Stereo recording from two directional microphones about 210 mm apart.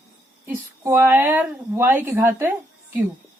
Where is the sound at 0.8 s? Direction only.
10° right (ahead or behind).